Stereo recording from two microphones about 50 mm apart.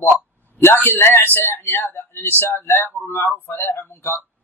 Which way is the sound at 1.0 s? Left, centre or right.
Left.